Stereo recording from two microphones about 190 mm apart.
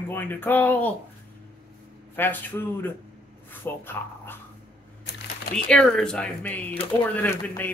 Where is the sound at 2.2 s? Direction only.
10° left (ahead or behind).